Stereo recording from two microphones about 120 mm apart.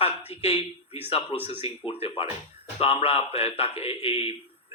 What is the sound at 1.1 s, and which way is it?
A man's voice, 45° left (ahead or behind).